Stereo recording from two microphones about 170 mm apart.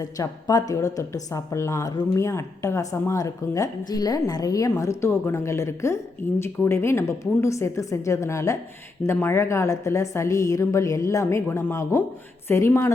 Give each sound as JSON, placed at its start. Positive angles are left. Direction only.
{"t": 0.0, "sound": "a woman's voice", "side_deg": 20}